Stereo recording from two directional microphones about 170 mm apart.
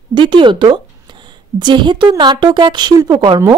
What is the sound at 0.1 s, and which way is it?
A woman's voice, 30° right (ahead or behind).